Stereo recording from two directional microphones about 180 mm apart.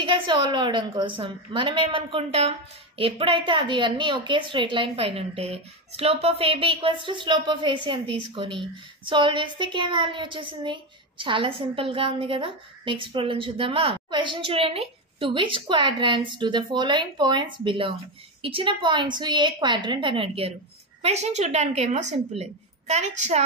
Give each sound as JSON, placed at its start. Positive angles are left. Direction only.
{"t": 0.0, "sound": "a woman's voice", "side_deg": -25}